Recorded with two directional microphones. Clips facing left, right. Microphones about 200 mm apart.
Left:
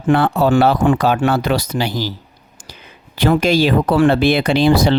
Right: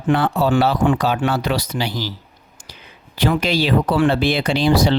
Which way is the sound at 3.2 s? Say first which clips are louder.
Left 5 dB; 45° left (ahead or behind).